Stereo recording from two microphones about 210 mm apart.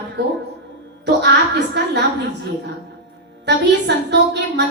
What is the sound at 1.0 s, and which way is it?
Speech, 55° right (ahead or behind).